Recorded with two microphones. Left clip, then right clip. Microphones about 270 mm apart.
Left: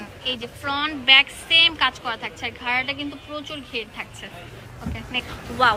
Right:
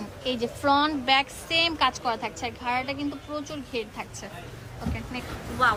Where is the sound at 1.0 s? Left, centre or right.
Right.